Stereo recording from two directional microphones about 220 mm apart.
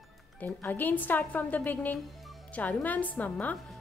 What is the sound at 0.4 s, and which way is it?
A woman's voice, 10° left (ahead or behind).